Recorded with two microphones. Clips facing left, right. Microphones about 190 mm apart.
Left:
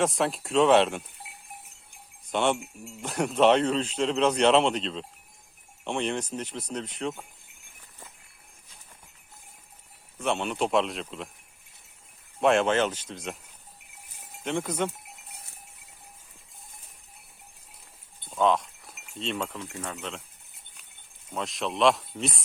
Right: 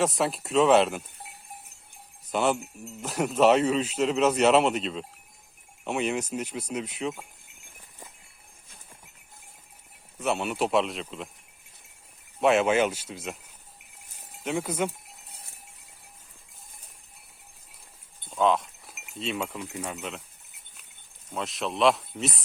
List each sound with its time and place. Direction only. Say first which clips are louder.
0.0 s speech: even; centre (ahead or behind)
1.2 s cowbell: right 1 dB; 45° right (ahead or behind)
2.3 s speech: even; 5° right (ahead or behind)
10.2 s speech: even; 5° right (ahead or behind)
12.4 s speech: right 1 dB; 5° right (ahead or behind)
14.4 s speech: even; 5° right (ahead or behind)
18.3 s speech: even; centre (ahead or behind)
21.3 s speech: even; centre (ahead or behind)